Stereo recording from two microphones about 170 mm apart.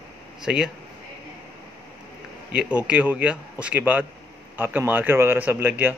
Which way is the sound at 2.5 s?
5° right (ahead or behind).